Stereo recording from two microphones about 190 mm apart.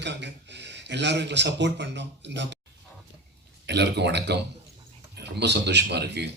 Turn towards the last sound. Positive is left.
turn(degrees=-60)  # may be behind; listen again after turning